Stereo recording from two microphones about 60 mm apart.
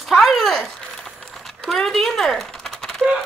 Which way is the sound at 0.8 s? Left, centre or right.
Centre.